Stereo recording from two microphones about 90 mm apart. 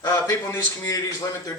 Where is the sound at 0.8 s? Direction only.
40° left (ahead or behind).